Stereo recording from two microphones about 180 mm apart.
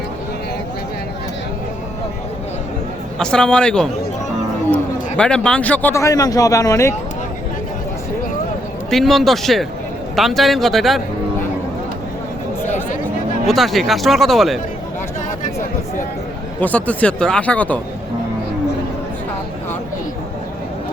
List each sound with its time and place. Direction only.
3.2 s a man's voice: 5° left (ahead or behind)
8.9 s speech: centre (ahead or behind)
13.5 s speech: centre (ahead or behind)
16.6 s a man's voice: 10° left (ahead or behind)